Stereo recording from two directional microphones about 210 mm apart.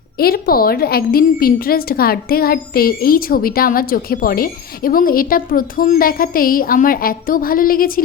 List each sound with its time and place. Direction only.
0.2 s a woman's voice: 45° left (ahead or behind)